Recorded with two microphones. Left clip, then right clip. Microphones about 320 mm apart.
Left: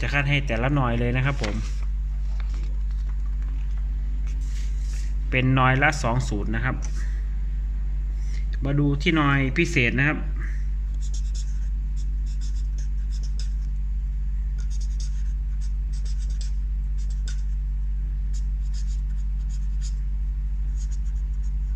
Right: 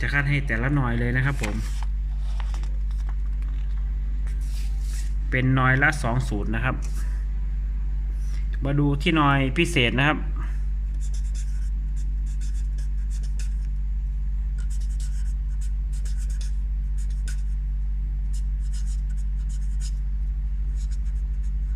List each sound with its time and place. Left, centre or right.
0.0 s speech: centre
5.3 s speech: centre
8.5 s speech: centre